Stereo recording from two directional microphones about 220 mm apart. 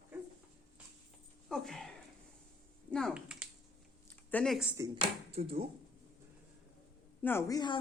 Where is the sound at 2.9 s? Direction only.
Centre (ahead or behind).